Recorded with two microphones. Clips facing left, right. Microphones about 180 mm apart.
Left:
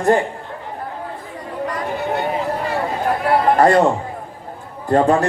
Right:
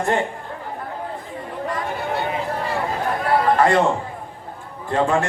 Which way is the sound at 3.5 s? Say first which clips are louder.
Left 5 dB; 40° left (ahead or behind).